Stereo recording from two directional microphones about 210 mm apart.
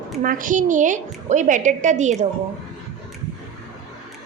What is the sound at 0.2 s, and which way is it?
A woman's voice, 40° right (ahead or behind).